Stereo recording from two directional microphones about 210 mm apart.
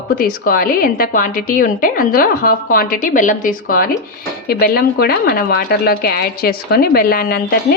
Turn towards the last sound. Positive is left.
turn(degrees=45)  # may be behind; listen again after turning